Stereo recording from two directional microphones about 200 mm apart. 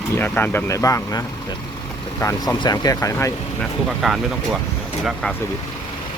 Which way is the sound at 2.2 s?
15° left (ahead or behind).